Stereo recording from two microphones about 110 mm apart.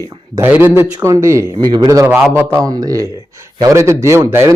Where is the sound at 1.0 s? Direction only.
25° right (ahead or behind).